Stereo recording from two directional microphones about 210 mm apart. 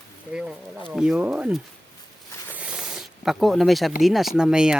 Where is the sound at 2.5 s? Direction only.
5° right (ahead or behind).